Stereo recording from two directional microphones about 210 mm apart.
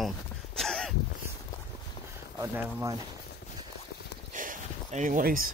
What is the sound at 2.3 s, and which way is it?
Speech, 15° right (ahead or behind).